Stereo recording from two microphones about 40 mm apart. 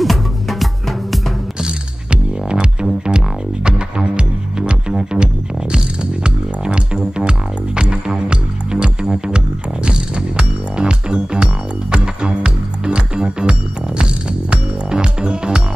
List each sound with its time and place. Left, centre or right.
0.0 s music: centre
1.6 s music: centre